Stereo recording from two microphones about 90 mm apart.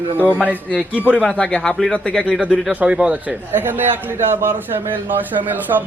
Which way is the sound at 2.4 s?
10° right (ahead or behind).